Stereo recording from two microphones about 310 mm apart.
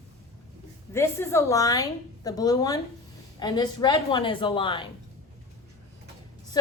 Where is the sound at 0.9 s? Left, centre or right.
Centre.